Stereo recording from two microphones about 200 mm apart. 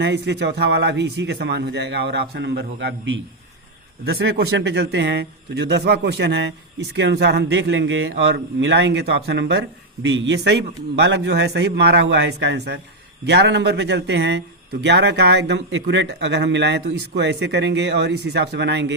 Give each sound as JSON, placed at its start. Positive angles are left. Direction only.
{"t": 0.0, "sound": "speech", "side_deg": -60}
{"t": 4.0, "sound": "speech", "side_deg": -55}